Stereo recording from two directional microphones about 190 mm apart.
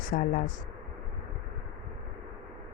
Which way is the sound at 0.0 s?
45° left (ahead or behind).